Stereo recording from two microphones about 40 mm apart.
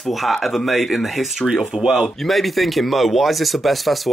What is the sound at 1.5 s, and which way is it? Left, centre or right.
Speech, centre.